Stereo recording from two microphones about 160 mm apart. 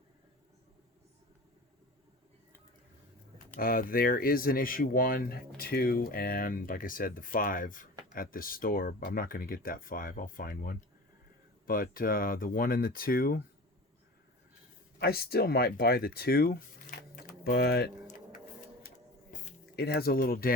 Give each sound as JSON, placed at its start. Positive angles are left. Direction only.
{"t": 3.6, "sound": "speech", "side_deg": 65}
{"t": 14.9, "sound": "speech", "side_deg": 75}
{"t": 17.4, "sound": "speech", "side_deg": 75}
{"t": 19.3, "sound": "squish", "side_deg": 55}
{"t": 19.7, "sound": "speech", "side_deg": 80}